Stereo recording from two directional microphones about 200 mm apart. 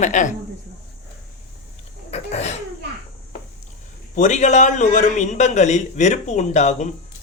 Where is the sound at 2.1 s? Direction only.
35° left (ahead or behind).